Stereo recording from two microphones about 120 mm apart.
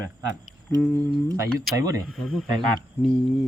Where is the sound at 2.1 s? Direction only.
Centre (ahead or behind).